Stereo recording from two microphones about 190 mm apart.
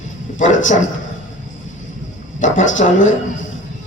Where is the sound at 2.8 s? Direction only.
50° left (ahead or behind).